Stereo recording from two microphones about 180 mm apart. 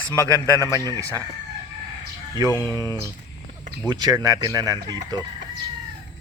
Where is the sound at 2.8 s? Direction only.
20° right (ahead or behind).